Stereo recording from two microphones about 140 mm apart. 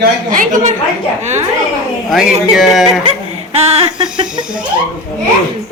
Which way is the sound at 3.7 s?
45° right (ahead or behind).